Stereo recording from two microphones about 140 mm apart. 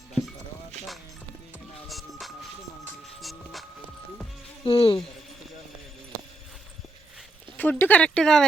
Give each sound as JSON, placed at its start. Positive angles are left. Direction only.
{"t": 0.8, "sound": "music", "side_deg": -55}
{"t": 1.9, "sound": "music", "side_deg": 0}
{"t": 4.6, "sound": "speech", "side_deg": 40}
{"t": 7.5, "sound": "speech", "side_deg": 10}